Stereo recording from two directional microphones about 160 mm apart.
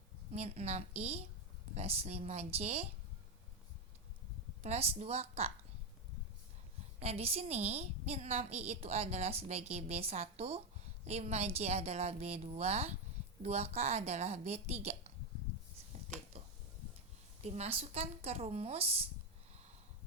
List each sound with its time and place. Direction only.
0.3 s a woman's voice: 45° right (ahead or behind)
4.6 s a woman's voice: 40° right (ahead or behind)
7.0 s a woman's voice: 40° right (ahead or behind)
16.3 s a sound: 40° right (ahead or behind)
17.4 s a woman's voice: 40° right (ahead or behind)